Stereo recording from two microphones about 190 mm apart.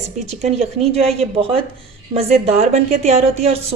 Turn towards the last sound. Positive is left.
turn(degrees=-35)  # may be behind; listen again after turning